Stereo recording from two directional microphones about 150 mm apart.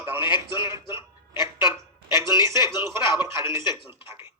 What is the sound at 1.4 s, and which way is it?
Speech, 30° left (ahead or behind).